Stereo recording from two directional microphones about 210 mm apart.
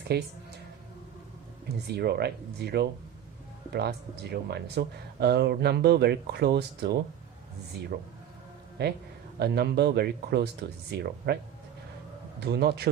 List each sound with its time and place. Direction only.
0.1 s speech: 50° right (ahead or behind)
1.6 s speech: 50° right (ahead or behind)
7.9 s speech: 45° right (ahead or behind)
12.4 s speech: 50° right (ahead or behind)